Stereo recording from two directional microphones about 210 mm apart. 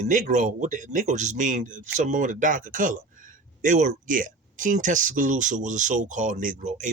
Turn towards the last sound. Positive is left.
turn(degrees=-35)  # may be behind; listen again after turning